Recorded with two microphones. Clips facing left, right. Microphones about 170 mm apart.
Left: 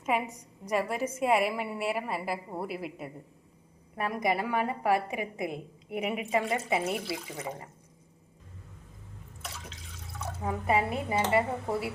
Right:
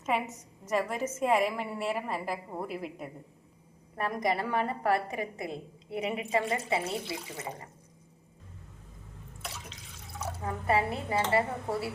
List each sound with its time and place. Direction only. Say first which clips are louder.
0.0 s a woman's voice: left 1 dB; 10° left (ahead or behind)
10.4 s a woman's voice: left 1 dB; 15° left (ahead or behind)